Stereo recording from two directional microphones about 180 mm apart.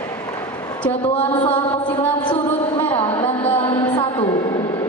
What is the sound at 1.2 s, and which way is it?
Mantra, 10° left (ahead or behind).